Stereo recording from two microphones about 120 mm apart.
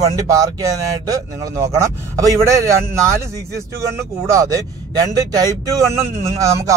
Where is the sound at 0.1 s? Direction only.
30° right (ahead or behind).